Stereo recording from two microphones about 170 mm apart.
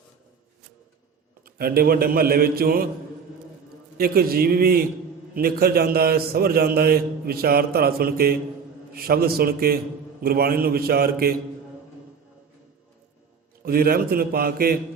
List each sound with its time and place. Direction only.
1.5 s a man's voice: 60° right (ahead or behind)
3.9 s a man's voice: 60° right (ahead or behind)
13.6 s a man's voice: 60° right (ahead or behind)